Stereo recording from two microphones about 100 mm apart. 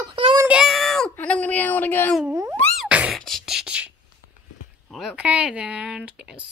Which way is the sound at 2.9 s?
10° right (ahead or behind).